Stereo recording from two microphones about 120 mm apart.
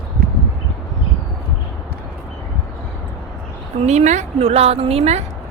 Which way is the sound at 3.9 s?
75° right (ahead or behind).